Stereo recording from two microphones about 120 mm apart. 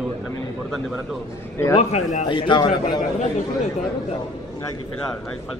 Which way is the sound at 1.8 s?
70° left (ahead or behind).